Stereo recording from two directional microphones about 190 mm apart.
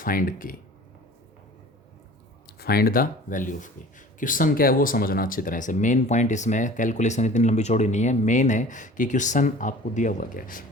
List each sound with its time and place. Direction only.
0.0 s speech: 45° left (ahead or behind)
2.6 s speech: 55° left (ahead or behind)